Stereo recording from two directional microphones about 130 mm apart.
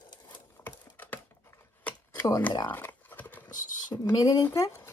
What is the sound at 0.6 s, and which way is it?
Typing, 15° left (ahead or behind).